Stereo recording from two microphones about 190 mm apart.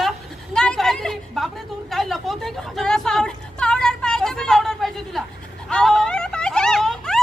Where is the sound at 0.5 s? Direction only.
5° left (ahead or behind).